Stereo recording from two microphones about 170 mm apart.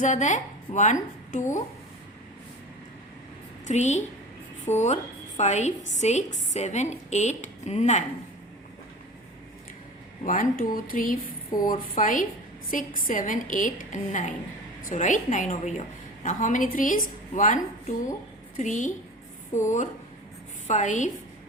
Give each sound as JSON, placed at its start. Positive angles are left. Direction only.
{"t": 0.0, "sound": "a woman's voice", "side_deg": 45}
{"t": 3.7, "sound": "a woman's voice", "side_deg": 45}
{"t": 10.2, "sound": "a woman's voice", "side_deg": 50}